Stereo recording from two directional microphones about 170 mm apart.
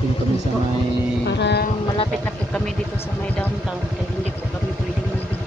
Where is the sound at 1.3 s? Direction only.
90° left.